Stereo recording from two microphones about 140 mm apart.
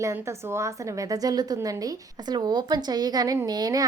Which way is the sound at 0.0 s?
20° right (ahead or behind).